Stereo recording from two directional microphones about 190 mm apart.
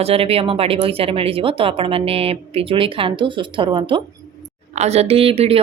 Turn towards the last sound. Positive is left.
turn(degrees=-30)  # may be behind; listen again after turning